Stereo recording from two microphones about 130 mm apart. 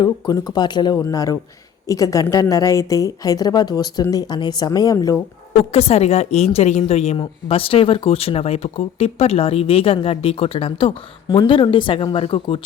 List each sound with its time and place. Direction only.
0.0 s speech: 30° left (ahead or behind)
5.7 s speech: 55° left (ahead or behind)